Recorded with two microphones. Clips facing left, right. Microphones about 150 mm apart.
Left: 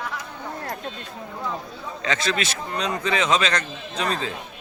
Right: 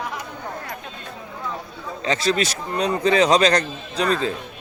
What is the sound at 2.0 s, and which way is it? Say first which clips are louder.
A man's voice: right 4 dB; 35° right (ahead or behind).